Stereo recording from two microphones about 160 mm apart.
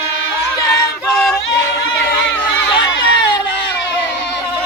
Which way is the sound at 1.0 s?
5° left (ahead or behind).